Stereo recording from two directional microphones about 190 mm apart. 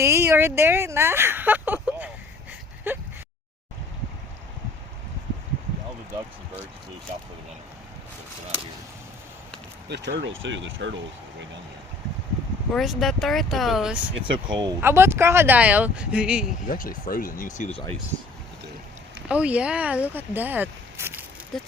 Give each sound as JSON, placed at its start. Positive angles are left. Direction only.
{"t": 0.0, "sound": "speech", "side_deg": -15}
{"t": 2.5, "sound": "a sound", "side_deg": -10}
{"t": 9.9, "sound": "speech", "side_deg": -70}
{"t": 12.7, "sound": "speech", "side_deg": 0}
{"t": 14.2, "sound": "speech", "side_deg": -25}
{"t": 14.8, "sound": "speech", "side_deg": -10}
{"t": 16.6, "sound": "speech", "side_deg": 45}
{"t": 19.3, "sound": "speech", "side_deg": -5}
{"t": 21.5, "sound": "speech", "side_deg": 0}